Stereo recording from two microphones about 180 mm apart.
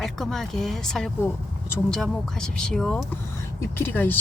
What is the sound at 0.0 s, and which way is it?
Speech, centre (ahead or behind).